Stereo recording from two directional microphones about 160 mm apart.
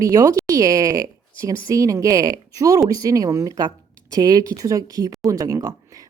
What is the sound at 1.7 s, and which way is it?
A woman's voice, 20° right (ahead or behind).